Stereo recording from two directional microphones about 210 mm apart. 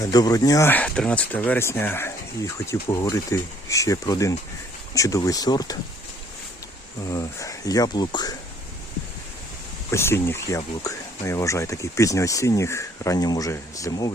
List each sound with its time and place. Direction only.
0.0 s speech: 20° left (ahead or behind)
7.1 s speech: 15° left (ahead or behind)
9.9 s speech: 10° left (ahead or behind)